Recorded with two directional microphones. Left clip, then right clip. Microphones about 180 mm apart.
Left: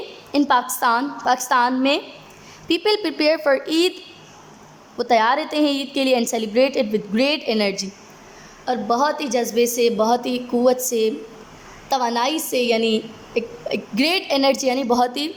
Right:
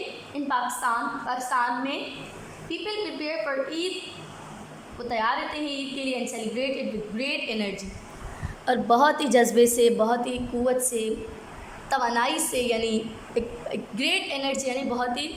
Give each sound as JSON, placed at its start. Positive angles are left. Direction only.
{"t": 0.3, "sound": "a woman's voice", "side_deg": 45}
{"t": 4.9, "sound": "a woman's voice", "side_deg": 40}
{"t": 8.6, "sound": "a woman's voice", "side_deg": 5}
{"t": 13.9, "sound": "a woman's voice", "side_deg": 25}